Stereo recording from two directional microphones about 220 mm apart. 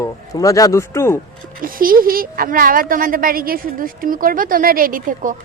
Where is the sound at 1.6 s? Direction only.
40° right (ahead or behind).